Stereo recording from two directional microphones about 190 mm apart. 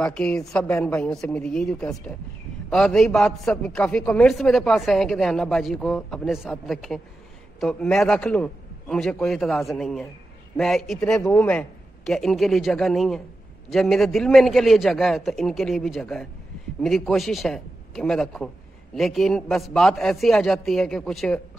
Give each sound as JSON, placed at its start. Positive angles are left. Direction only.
{"t": 0.0, "sound": "a man's voice", "side_deg": 5}